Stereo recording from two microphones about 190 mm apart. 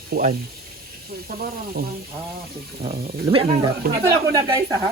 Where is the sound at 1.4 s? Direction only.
50° right (ahead or behind).